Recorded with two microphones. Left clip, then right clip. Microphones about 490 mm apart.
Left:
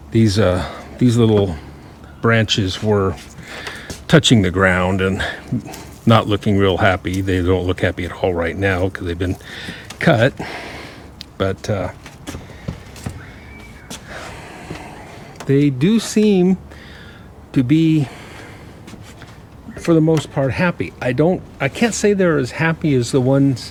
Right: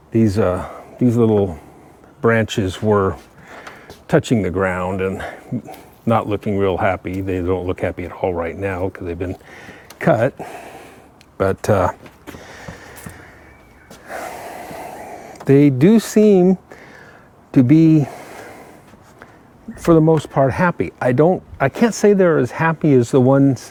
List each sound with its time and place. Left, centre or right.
0.1 s speech: centre
3.8 s speech: centre
10.3 s a sound: centre
11.3 s speech: right
14.1 s gasp: right
15.4 s speech: right
19.8 s speech: right